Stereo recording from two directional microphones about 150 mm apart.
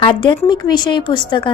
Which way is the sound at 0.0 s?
35° left (ahead or behind).